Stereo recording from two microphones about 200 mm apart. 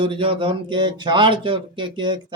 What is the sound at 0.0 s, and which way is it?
Speech, 25° right (ahead or behind).